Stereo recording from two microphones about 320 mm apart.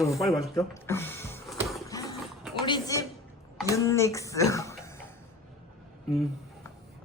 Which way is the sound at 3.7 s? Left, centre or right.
Centre.